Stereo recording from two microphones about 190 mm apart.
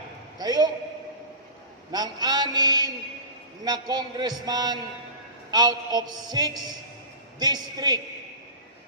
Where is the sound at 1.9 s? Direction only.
20° right (ahead or behind).